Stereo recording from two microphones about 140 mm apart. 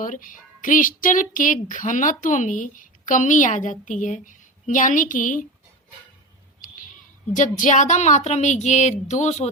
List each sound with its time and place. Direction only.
0.0 s a woman's voice: 70° left (ahead or behind)
7.3 s speech: 60° left (ahead or behind)